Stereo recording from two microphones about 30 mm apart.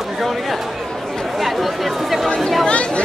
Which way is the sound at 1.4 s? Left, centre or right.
Centre.